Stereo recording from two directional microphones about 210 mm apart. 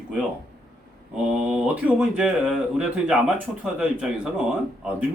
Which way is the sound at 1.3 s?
5° right (ahead or behind).